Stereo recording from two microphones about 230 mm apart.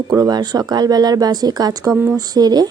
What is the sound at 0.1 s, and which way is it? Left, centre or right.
Speech, centre.